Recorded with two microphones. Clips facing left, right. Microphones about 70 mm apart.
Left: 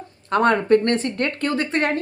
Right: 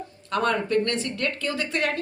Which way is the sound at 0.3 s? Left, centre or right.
Left.